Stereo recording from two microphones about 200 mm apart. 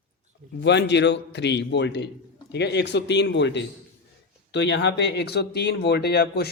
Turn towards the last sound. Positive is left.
turn(degrees=50)  # may be behind; listen again after turning